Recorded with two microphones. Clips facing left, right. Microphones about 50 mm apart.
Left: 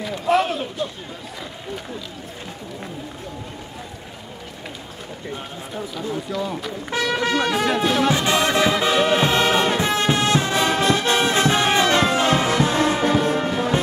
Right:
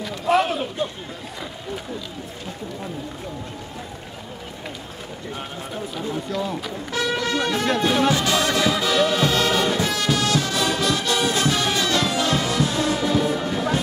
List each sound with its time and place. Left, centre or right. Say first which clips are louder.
0.0 s a sound: even; centre
6.0 s speech: even; centre
7.2 s music: left 2 dB; left
7.6 s music: even; centre
8.1 s music: left 1 dB; left